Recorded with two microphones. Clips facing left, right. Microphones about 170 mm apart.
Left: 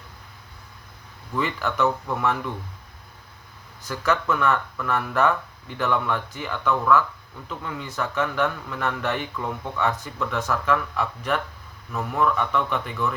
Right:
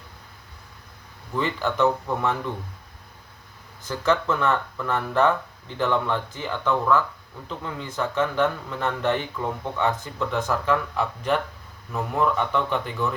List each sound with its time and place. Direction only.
1.6 s speech: 30° right (ahead or behind)
4.0 s speech: 30° right (ahead or behind)